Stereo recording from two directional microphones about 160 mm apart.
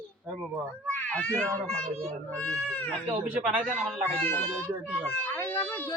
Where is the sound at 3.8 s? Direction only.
5° left (ahead or behind).